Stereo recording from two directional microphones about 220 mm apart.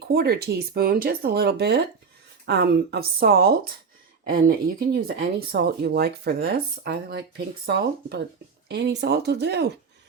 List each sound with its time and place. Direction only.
0.1 s speech: 45° right (ahead or behind)